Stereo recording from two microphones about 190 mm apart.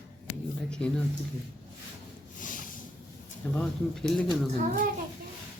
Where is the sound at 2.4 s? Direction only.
45° left (ahead or behind).